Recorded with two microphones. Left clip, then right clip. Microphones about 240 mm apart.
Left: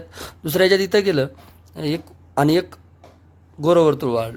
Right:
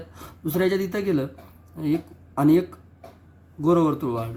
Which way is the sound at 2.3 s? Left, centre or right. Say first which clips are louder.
Left 2 dB; left.